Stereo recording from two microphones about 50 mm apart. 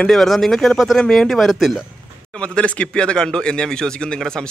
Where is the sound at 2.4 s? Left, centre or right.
Left.